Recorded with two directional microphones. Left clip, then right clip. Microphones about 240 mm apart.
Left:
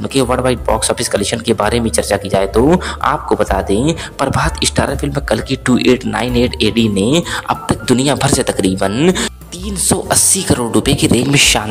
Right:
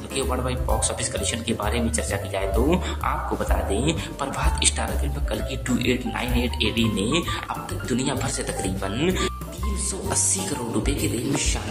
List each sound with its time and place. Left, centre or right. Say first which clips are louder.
0.1 s speech: left 12 dB; left